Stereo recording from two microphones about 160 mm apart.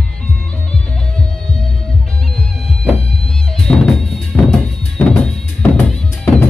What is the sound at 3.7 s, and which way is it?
Music, 5° left (ahead or behind).